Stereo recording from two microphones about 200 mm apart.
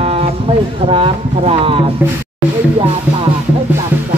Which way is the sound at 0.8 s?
25° right (ahead or behind).